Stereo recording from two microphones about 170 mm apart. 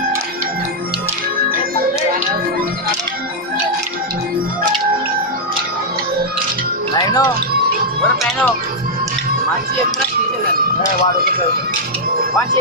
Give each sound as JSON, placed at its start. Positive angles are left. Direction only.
{"t": 7.0, "sound": "music", "side_deg": 20}